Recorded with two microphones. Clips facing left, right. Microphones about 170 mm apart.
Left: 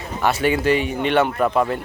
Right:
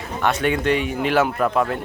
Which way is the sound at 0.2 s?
5° left (ahead or behind).